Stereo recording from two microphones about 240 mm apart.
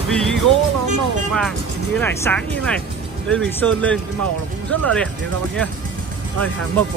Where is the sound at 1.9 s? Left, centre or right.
Centre.